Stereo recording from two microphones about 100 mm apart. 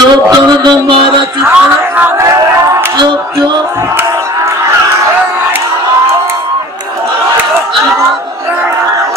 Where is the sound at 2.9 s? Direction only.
50° right (ahead or behind).